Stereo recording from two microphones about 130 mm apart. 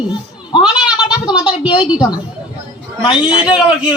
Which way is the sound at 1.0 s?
35° left (ahead or behind).